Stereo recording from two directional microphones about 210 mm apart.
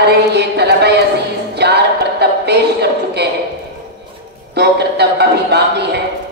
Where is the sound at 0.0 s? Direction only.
50° right (ahead or behind).